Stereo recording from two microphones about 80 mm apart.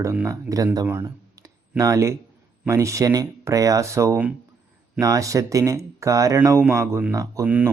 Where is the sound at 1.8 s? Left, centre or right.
Right.